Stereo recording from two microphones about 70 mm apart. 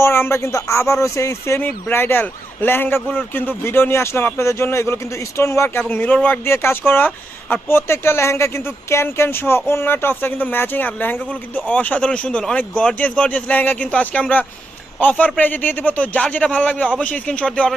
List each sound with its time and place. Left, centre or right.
0.0 s speech: left
1.5 s speech: left
5.9 s speech: left
6.4 s a man's voice: left; by 17.7 s centre